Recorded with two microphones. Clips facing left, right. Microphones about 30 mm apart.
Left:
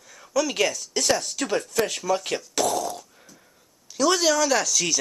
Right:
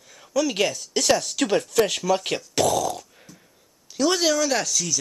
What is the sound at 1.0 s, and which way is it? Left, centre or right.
Speech, right.